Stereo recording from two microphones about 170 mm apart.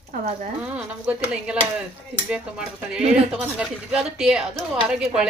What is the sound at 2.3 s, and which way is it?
Speech, 5° right (ahead or behind).